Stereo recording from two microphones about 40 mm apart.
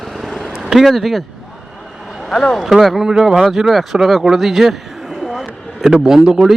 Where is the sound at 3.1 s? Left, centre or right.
Centre.